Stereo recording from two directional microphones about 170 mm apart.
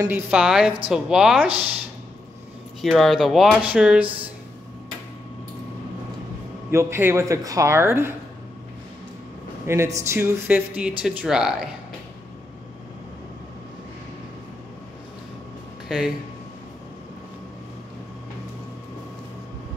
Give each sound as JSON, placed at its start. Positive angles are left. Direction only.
{"t": 0.0, "sound": "speech", "side_deg": -10}
{"t": 2.8, "sound": "speech", "side_deg": 0}
{"t": 6.7, "sound": "speech", "side_deg": -15}
{"t": 9.7, "sound": "speech", "side_deg": -15}
{"t": 15.9, "sound": "speech", "side_deg": -5}